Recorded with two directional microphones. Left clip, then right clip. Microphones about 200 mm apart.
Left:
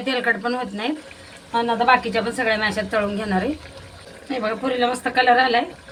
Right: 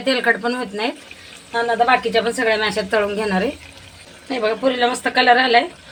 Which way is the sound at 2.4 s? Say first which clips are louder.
Right 3 dB; 50° right (ahead or behind).